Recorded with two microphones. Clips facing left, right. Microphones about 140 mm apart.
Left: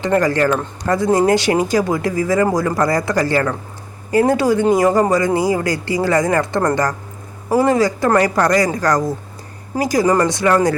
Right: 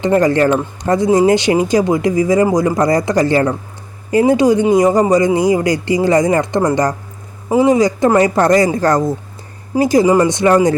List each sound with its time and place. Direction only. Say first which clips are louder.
0.0 s speech: right 3 dB; 20° right (ahead or behind)